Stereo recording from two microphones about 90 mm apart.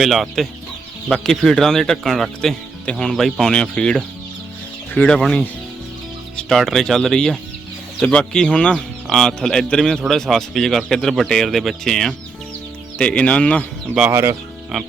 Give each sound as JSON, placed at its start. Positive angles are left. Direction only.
{"t": 0.0, "sound": "speech", "side_deg": 0}
{"t": 14.1, "sound": "speech", "side_deg": -25}